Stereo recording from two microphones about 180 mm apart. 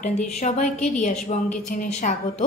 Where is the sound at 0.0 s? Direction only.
40° left (ahead or behind).